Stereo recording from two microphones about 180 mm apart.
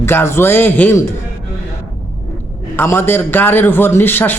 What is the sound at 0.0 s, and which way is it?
A man's voice, 15° left (ahead or behind).